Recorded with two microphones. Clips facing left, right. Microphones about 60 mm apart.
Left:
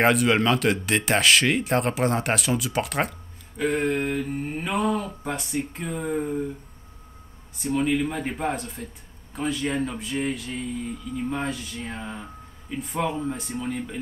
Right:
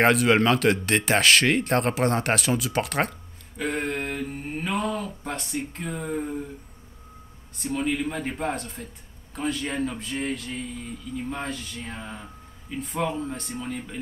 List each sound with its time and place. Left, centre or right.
0.0 s speech: centre
7.5 s speech: centre